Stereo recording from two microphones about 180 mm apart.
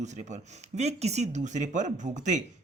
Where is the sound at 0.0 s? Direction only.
40° right (ahead or behind).